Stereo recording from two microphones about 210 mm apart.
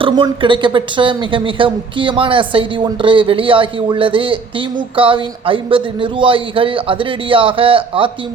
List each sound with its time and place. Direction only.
0.0 s speech: 25° right (ahead or behind)